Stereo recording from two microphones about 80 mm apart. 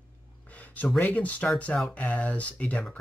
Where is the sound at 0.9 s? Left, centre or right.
Centre.